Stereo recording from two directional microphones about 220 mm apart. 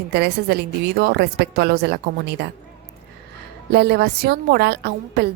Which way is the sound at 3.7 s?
45° right (ahead or behind).